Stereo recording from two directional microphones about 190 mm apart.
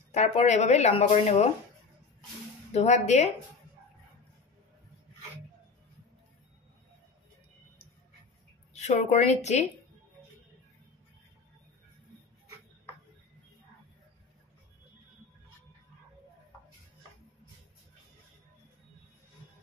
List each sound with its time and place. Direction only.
0.1 s speech: 35° left (ahead or behind)
2.7 s speech: 35° left (ahead or behind)
8.7 s speech: 35° left (ahead or behind)